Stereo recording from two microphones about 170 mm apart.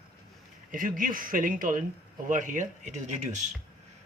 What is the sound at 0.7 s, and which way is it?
Speech, 55° right (ahead or behind).